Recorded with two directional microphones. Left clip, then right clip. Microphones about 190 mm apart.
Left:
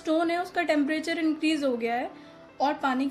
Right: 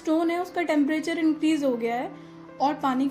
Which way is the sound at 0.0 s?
30° left (ahead or behind).